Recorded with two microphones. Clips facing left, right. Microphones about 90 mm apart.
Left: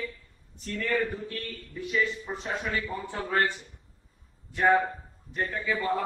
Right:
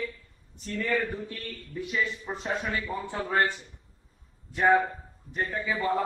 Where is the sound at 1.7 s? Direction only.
20° right (ahead or behind).